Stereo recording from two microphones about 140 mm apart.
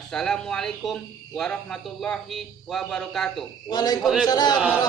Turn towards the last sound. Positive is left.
turn(degrees=30)  # may be behind; listen again after turning